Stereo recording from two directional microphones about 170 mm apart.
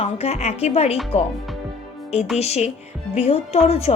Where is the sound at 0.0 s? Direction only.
40° left (ahead or behind).